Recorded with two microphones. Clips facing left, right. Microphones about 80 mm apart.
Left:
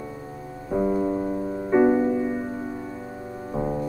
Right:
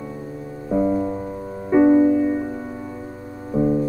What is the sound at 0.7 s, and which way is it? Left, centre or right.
Music, centre.